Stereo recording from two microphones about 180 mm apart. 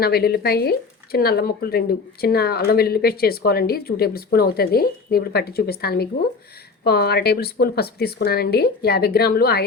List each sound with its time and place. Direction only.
0.0 s speech: 60° left (ahead or behind)